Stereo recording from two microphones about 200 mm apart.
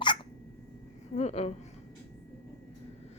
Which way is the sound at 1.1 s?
35° left (ahead or behind).